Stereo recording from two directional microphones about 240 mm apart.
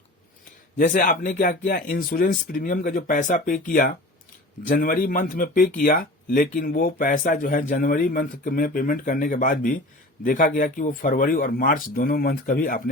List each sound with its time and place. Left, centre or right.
0.8 s speech: left